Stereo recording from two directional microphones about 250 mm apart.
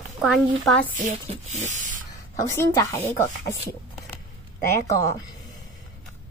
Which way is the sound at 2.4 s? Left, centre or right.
Centre.